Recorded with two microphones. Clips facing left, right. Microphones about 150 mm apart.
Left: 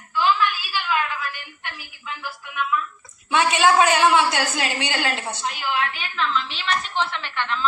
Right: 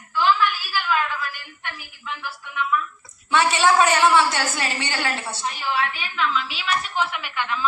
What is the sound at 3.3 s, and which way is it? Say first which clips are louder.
A woman's voice: even; 15° left (ahead or behind).